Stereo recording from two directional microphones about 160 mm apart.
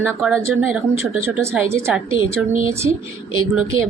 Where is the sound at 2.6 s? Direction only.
15° right (ahead or behind).